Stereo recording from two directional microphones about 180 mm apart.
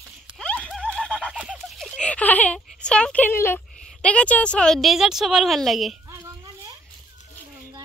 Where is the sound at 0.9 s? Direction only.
5° left (ahead or behind).